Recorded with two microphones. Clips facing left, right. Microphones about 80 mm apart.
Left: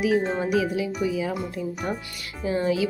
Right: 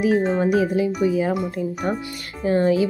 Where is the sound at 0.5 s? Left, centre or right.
Right.